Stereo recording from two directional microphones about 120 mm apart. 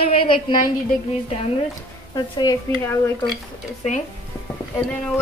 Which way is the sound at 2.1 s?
40° left (ahead or behind).